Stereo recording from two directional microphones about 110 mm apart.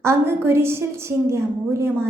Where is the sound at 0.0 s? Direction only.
25° right (ahead or behind).